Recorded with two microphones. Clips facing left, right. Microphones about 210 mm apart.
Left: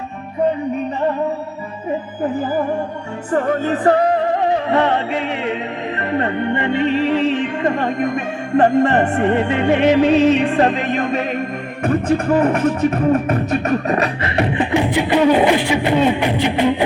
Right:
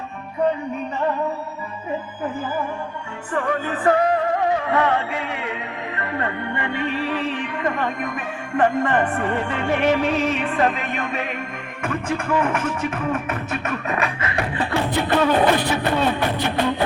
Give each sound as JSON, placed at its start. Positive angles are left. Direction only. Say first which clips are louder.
{"t": 2.3, "sound": "music", "louder": "left 8 dB", "side_deg": 35}
{"t": 9.1, "sound": "music", "louder": "left 7 dB", "side_deg": 25}
{"t": 10.4, "sound": "music", "louder": "left 6 dB", "side_deg": 35}